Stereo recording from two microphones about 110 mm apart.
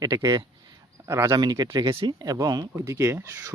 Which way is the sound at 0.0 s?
35° right (ahead or behind).